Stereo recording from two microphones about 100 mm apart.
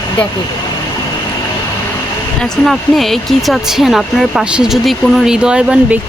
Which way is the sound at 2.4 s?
Centre (ahead or behind).